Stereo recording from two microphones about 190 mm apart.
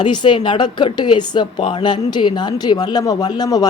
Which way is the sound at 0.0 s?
25° left (ahead or behind).